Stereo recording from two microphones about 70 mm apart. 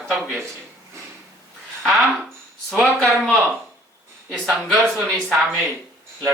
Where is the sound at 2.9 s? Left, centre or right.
Centre.